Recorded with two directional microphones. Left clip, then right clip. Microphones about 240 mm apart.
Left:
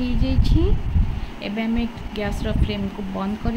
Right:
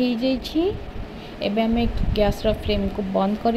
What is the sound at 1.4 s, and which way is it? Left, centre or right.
A woman's voice, centre.